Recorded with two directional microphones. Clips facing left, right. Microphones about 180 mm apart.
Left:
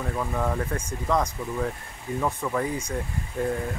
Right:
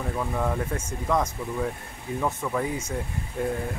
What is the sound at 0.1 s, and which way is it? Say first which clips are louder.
Speech: even; 5° right (ahead or behind).